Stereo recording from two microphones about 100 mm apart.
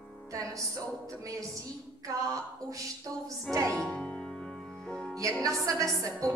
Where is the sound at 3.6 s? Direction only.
10° left (ahead or behind).